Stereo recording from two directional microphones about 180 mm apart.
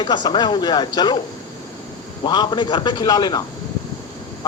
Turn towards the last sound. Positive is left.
turn(degrees=20)  # may be behind; listen again after turning